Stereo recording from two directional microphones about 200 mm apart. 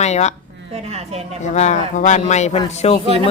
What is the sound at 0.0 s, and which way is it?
Speech, 35° left (ahead or behind).